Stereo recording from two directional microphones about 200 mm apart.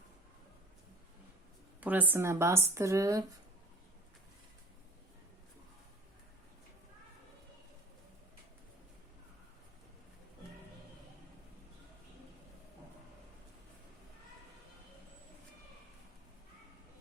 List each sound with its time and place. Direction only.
1.8 s speech: 10° right (ahead or behind)